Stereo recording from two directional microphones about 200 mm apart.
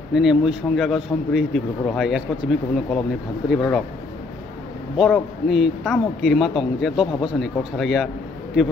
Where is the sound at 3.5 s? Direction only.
Centre (ahead or behind).